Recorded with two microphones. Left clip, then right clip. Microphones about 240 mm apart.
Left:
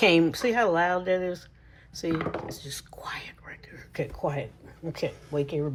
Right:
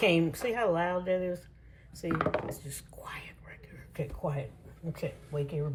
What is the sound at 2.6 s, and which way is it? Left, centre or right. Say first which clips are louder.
Whispering: left 7 dB; centre.